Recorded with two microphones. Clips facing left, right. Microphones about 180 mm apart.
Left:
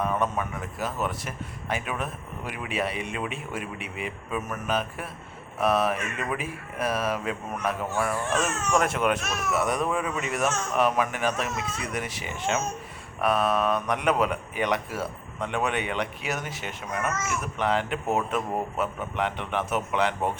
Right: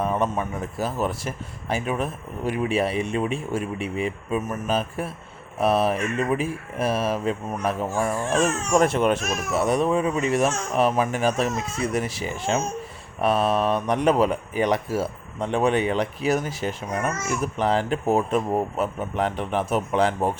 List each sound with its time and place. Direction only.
0.0 s speech: 30° right (ahead or behind)